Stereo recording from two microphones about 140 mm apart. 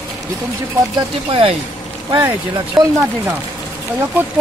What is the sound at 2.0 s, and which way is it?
Speech, 20° right (ahead or behind).